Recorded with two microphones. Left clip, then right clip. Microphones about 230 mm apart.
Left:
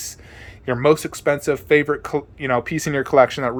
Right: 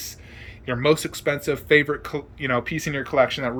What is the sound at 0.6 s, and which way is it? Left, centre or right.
Speech, centre.